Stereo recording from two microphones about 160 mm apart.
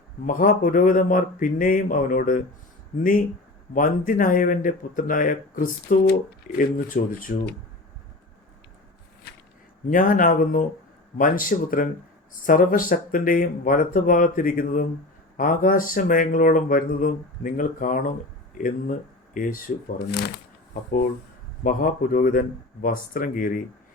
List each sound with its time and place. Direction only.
0.3 s speech: 60° left (ahead or behind)
9.2 s a sound: 85° left
9.9 s speech: 60° left (ahead or behind); by 20.3 s 90° left
21.6 s speech: 55° left (ahead or behind)